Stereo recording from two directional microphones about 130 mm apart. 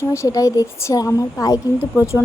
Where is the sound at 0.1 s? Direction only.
25° left (ahead or behind).